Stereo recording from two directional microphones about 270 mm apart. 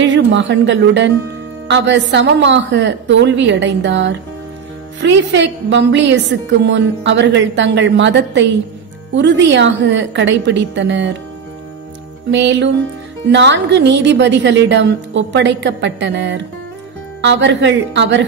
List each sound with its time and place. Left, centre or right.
0.0 s a woman's voice: right
12.3 s a woman's voice: right